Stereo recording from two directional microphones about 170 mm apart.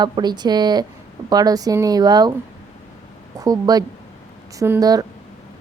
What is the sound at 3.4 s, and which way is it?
Speech, 20° right (ahead or behind).